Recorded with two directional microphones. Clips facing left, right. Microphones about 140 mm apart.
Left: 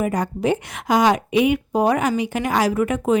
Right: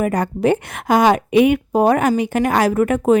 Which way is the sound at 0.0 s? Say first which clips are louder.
Right 4 dB; 60° right (ahead or behind).